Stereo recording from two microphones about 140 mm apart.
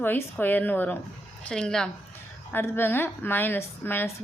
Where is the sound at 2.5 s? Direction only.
15° left (ahead or behind).